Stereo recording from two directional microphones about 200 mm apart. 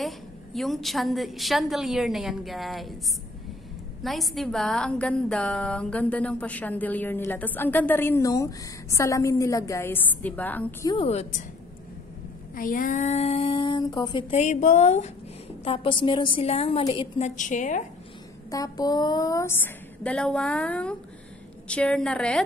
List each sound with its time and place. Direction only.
0.0 s a woman's voice: centre (ahead or behind)
4.0 s a woman's voice: centre (ahead or behind)
10.9 s speech: 30° left (ahead or behind)
12.5 s a woman's voice: 45° left (ahead or behind)
18.5 s a woman's voice: 20° left (ahead or behind)